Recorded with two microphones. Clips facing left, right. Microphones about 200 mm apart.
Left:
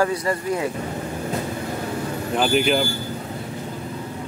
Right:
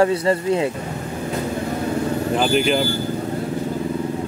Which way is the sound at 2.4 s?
Centre (ahead or behind).